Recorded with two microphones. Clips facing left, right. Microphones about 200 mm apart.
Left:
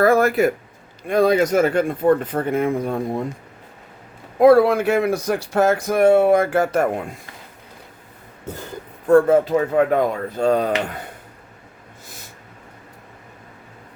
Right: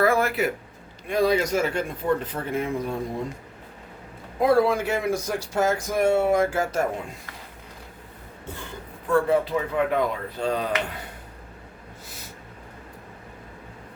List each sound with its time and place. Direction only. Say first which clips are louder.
0.0 s speech: left 6 dB; 45° left (ahead or behind)
4.4 s speech: left 7 dB; 65° left (ahead or behind)
8.4 s speech: left 6 dB; 40° left (ahead or behind)